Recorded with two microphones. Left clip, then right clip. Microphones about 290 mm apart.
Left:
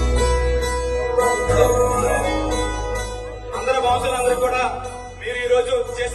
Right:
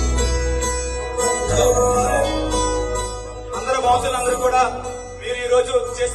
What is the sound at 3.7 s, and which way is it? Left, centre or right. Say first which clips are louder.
Music: right 1 dB; centre.